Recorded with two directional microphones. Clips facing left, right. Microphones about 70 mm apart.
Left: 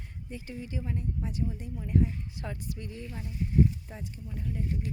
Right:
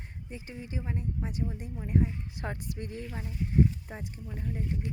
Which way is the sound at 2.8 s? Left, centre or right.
Right.